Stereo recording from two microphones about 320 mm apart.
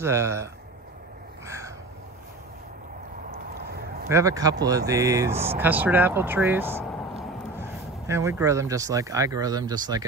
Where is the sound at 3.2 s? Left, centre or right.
Right.